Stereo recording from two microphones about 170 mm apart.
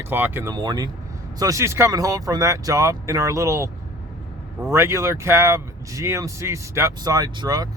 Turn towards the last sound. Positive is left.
turn(degrees=-20)  # may be behind; listen again after turning